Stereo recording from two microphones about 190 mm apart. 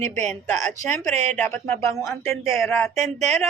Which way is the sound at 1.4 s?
15° left (ahead or behind).